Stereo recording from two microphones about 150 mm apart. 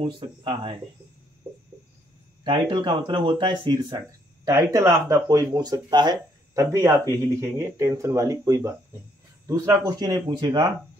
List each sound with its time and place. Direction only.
0.0 s speech: 35° right (ahead or behind)
2.7 s speech: 30° right (ahead or behind)